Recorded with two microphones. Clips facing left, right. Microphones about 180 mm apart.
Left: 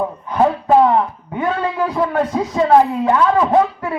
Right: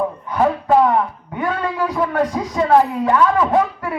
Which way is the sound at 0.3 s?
25° left (ahead or behind).